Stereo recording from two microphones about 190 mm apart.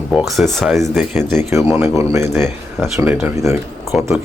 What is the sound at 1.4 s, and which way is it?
Speech, 15° right (ahead or behind).